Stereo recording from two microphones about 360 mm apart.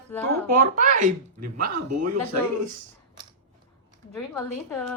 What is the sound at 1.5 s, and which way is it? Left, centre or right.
Speech, right.